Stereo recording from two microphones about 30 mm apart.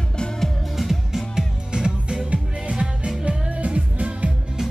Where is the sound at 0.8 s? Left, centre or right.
Centre.